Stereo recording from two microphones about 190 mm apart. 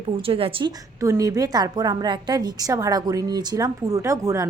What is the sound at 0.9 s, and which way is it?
A woman's voice, 15° right (ahead or behind).